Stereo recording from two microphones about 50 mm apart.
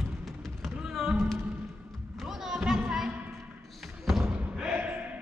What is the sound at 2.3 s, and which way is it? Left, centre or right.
Music, centre.